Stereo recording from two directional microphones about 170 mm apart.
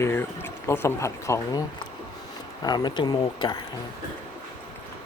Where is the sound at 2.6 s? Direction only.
25° left (ahead or behind).